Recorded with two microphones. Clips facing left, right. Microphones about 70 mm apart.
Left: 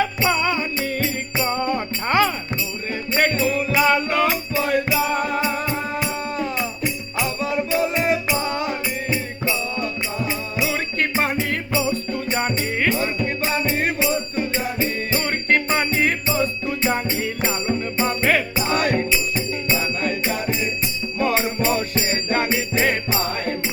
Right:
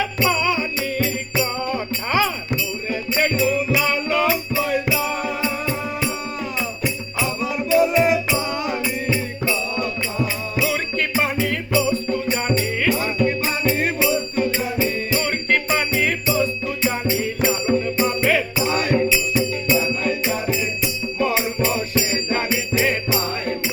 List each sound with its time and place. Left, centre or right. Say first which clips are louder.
0.3 s music: even; left
4.5 s music: left 1 dB; left
5.6 s music: even; left
12.3 s music: left 1 dB; left
14.0 s music: right 2 dB; left
18.7 s music: right 1 dB; left
21.2 s music: even; left